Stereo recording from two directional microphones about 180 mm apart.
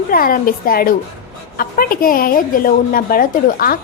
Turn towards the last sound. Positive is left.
turn(degrees=50)  # may be behind; listen again after turning